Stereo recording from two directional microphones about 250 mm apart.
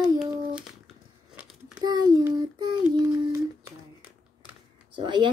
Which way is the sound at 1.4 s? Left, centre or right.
Centre.